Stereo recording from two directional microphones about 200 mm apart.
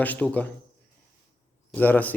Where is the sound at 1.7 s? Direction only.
10° left (ahead or behind).